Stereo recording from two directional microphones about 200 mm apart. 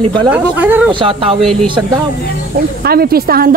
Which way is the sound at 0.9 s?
25° right (ahead or behind).